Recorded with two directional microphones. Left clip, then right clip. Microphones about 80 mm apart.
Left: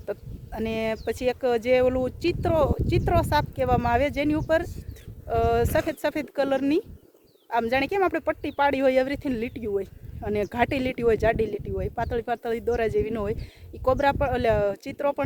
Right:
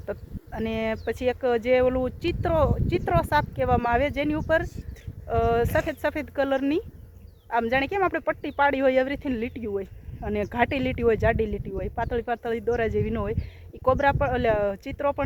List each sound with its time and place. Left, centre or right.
0.1 s speech: left
4.4 s speech: left
5.3 s speech: left
8.0 s speech: left
8.9 s speech: left